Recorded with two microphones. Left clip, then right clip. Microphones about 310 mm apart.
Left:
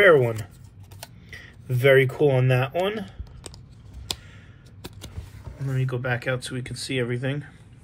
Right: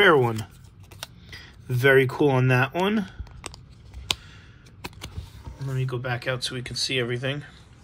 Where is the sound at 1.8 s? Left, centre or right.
Right.